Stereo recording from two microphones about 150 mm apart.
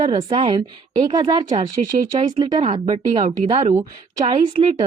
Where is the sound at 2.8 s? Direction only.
45° right (ahead or behind).